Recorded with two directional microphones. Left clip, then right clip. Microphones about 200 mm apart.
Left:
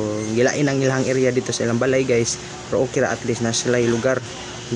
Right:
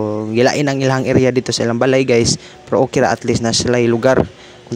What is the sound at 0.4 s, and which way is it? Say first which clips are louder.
Speech: right 5 dB; 45° right (ahead or behind).